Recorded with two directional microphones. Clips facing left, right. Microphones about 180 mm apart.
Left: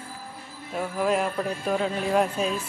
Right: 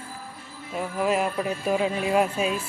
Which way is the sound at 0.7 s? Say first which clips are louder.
Even; centre (ahead or behind).